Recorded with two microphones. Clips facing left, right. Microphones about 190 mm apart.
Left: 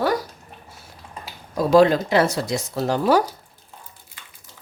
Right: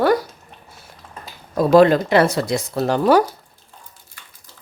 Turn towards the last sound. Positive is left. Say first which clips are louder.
# right 3 dB
turn(degrees=-60)  # may be behind; listen again after turning